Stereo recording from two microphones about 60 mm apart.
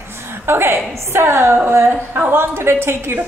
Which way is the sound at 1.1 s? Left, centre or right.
Right.